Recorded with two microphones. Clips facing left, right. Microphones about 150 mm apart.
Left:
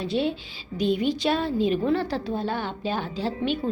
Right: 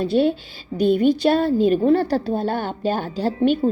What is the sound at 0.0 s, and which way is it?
A woman's voice, 50° right (ahead or behind).